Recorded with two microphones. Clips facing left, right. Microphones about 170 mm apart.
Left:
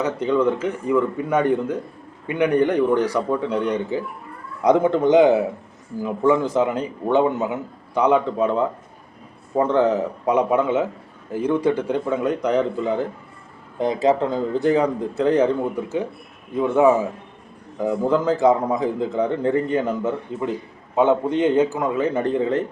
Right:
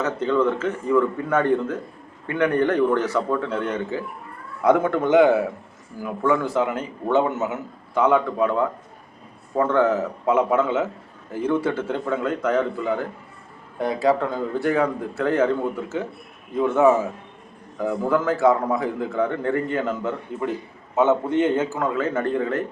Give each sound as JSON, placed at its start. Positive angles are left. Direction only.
{"t": 0.0, "sound": "a man's voice", "side_deg": 10}
{"t": 17.7, "sound": "a man's voice", "side_deg": 20}